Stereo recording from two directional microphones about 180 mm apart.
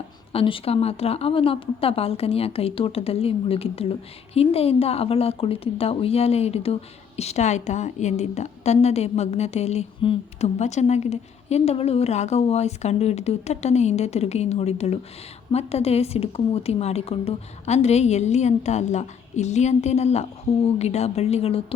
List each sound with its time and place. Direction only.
0.3 s a woman's voice: 30° left (ahead or behind)